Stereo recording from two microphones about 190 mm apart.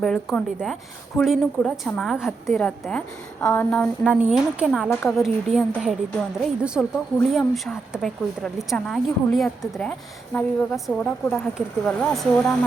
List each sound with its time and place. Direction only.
0.0 s a woman's voice: 5° left (ahead or behind)
4.0 s a woman's voice: 5° right (ahead or behind)